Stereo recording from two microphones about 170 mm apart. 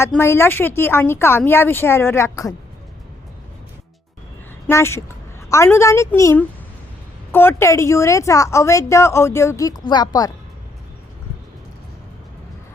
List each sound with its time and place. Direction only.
0.0 s a woman's voice: 15° left (ahead or behind)
4.7 s a woman's voice: 15° left (ahead or behind)